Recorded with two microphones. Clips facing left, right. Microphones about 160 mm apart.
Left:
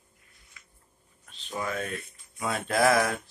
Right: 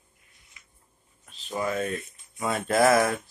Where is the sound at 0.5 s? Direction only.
20° right (ahead or behind).